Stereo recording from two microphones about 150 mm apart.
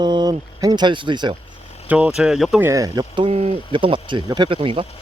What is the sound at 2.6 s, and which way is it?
Speech, 20° right (ahead or behind).